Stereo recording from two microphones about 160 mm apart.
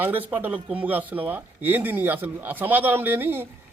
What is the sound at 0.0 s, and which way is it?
Speech, 10° right (ahead or behind).